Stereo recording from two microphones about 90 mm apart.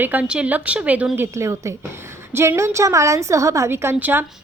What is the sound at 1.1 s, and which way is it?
A woman's voice, 30° right (ahead or behind).